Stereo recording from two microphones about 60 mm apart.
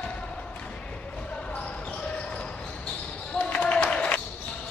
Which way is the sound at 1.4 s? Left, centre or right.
Centre.